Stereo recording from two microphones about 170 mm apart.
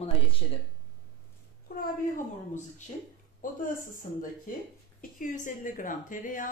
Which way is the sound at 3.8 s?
55° left (ahead or behind).